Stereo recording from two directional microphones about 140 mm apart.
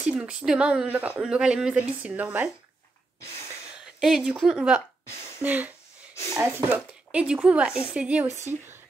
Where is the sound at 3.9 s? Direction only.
5° right (ahead or behind).